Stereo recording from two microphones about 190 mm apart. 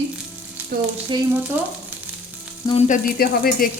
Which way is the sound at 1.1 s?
25° right (ahead or behind).